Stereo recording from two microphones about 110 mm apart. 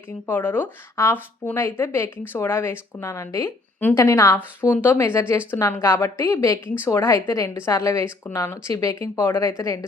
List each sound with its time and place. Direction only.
0.3 s a woman's voice: 20° left (ahead or behind)